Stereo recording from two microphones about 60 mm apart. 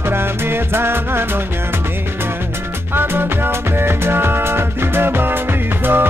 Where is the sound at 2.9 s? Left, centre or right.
Right.